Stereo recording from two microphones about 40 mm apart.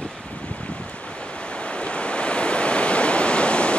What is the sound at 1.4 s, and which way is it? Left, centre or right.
Waves, left.